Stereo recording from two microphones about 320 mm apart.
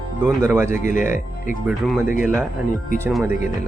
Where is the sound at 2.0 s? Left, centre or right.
Left.